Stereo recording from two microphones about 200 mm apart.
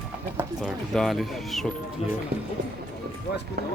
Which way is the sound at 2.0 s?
30° left (ahead or behind).